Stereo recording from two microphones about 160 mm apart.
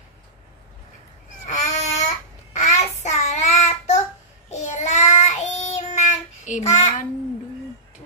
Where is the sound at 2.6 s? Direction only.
45° left (ahead or behind).